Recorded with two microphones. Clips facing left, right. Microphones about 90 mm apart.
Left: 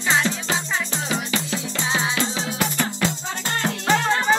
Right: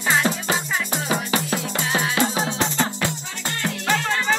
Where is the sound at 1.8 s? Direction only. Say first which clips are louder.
Left 1 dB; 20° left (ahead or behind).